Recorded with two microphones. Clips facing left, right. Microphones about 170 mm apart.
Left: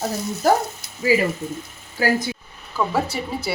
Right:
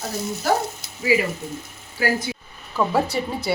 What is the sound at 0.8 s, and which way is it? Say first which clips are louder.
Frying: right 1 dB; 25° right (ahead or behind).